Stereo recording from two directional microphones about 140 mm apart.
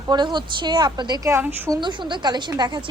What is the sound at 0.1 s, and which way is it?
A woman's voice, 30° right (ahead or behind).